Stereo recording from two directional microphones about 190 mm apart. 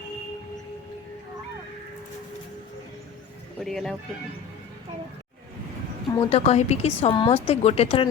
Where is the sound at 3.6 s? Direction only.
Centre (ahead or behind).